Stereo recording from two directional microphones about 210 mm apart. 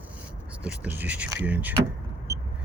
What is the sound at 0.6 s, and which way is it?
Speech, 5° right (ahead or behind).